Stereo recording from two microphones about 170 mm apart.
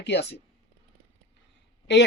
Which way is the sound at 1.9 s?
90° left.